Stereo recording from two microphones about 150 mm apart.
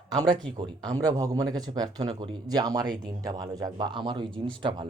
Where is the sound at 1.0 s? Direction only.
25° right (ahead or behind).